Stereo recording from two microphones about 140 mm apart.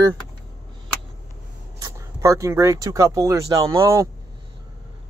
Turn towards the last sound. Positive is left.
turn(degrees=-25)  # may be behind; listen again after turning